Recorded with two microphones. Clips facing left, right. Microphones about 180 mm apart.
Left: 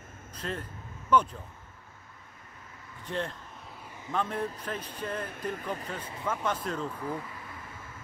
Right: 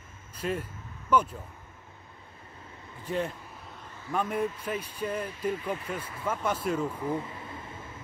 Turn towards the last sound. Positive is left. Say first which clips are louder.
# right 3 dB
turn(degrees=-25)  # may be behind; listen again after turning